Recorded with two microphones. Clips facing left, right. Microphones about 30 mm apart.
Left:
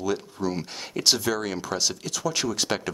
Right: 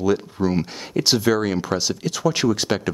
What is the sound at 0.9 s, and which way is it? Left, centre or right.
Speech, centre.